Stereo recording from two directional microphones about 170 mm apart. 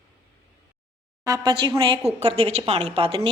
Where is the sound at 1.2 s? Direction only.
20° right (ahead or behind).